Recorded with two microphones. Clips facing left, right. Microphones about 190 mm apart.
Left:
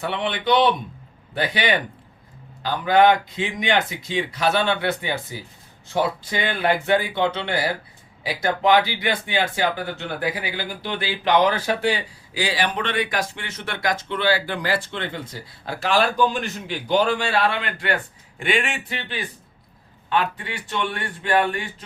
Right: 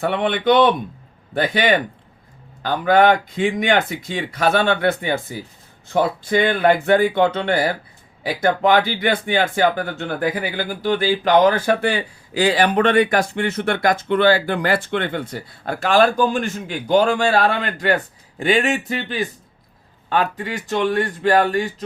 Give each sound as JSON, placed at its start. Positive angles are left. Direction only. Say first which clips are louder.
{"t": 0.0, "sound": "speech", "louder": "right 6 dB", "side_deg": -50}